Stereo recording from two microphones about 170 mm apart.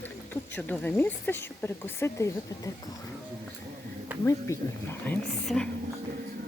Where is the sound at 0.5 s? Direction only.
10° left (ahead or behind).